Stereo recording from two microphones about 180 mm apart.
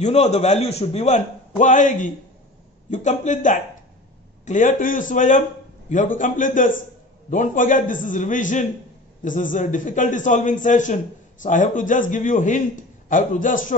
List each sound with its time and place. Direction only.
0.0 s a man's voice: 35° left (ahead or behind)